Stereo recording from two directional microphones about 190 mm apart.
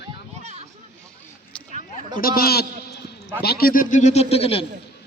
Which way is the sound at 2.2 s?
50° left (ahead or behind).